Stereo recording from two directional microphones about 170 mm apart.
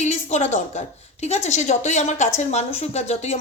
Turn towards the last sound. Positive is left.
turn(degrees=40)  # may be behind; listen again after turning